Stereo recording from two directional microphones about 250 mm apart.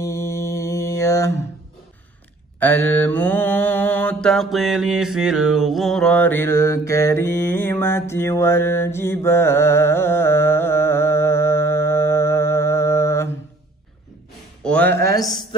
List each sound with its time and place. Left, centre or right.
0.0 s mantra: centre
2.6 s mantra: centre
14.6 s speech: centre